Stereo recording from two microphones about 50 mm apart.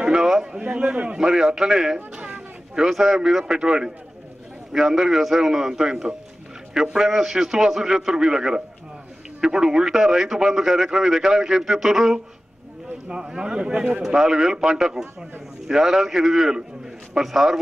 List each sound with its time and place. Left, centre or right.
0.1 s a man's voice: centre